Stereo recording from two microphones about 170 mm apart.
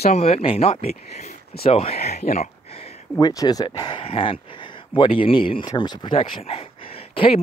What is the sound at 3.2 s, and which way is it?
Speech, 20° left (ahead or behind).